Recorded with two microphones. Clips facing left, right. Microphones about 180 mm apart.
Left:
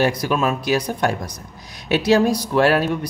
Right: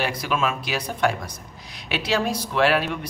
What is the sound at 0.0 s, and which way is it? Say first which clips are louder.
Speech: left 5 dB; 40° left (ahead or behind).